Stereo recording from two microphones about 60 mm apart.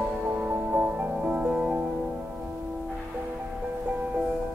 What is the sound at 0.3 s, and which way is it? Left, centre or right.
Music, right.